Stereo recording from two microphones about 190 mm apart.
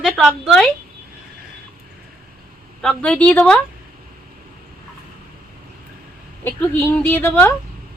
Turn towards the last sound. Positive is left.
turn(degrees=10)  # may be behind; listen again after turning